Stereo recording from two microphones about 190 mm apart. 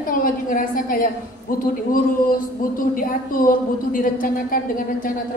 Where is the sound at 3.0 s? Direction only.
45° left (ahead or behind).